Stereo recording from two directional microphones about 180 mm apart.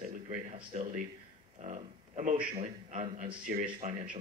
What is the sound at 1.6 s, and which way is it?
A man's voice, 40° right (ahead or behind).